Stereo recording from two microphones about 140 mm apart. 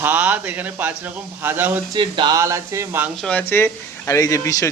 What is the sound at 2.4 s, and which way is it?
Speech, 20° right (ahead or behind).